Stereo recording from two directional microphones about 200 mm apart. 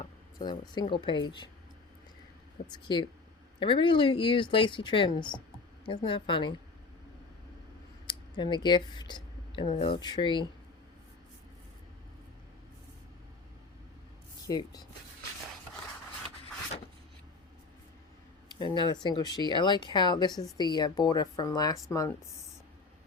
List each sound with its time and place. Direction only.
0.3 s speech: 20° left (ahead or behind)
2.8 s speech: 25° left (ahead or behind)
8.0 s a sound: 25° left (ahead or behind)
9.7 s speech: 25° left (ahead or behind)
14.4 s speech: 20° left (ahead or behind)
18.4 s speech: 20° left (ahead or behind)